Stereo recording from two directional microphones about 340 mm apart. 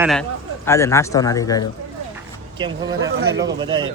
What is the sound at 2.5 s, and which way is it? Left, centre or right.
Speech, centre.